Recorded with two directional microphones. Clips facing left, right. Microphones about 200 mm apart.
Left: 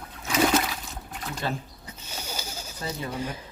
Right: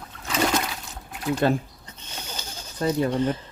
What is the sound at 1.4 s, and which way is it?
Speech, 55° right (ahead or behind).